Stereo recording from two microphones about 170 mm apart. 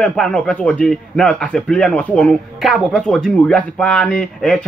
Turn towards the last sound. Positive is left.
turn(degrees=5)  # may be behind; listen again after turning